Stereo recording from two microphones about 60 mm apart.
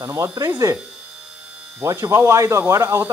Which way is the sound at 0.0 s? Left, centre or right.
Right.